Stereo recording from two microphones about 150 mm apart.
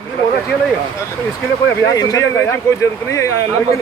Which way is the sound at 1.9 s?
25° left (ahead or behind).